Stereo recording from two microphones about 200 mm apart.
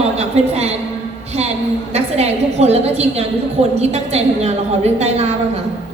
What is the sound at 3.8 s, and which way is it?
A woman's voice, 35° right (ahead or behind).